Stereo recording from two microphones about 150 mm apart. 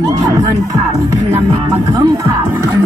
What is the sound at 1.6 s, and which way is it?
Music, 25° right (ahead or behind).